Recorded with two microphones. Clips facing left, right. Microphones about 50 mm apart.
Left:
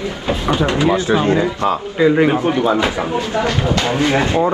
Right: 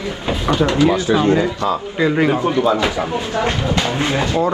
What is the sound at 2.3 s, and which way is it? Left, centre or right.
Speech, left.